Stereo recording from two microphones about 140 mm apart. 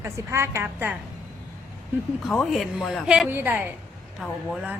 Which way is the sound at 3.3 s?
15° right (ahead or behind).